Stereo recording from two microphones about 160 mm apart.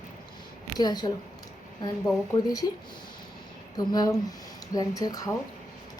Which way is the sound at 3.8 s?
25° left (ahead or behind).